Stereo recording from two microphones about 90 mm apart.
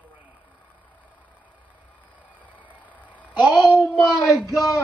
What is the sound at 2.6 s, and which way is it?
Vehicle, 15° right (ahead or behind).